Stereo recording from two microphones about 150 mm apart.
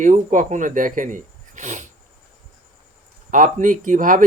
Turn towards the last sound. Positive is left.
turn(degrees=-60)  # may be behind; listen again after turning